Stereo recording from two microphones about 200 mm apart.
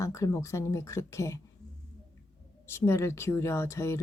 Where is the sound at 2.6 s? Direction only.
10° left (ahead or behind).